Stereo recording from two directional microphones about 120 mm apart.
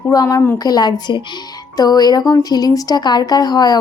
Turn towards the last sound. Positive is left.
turn(degrees=35)  # may be behind; listen again after turning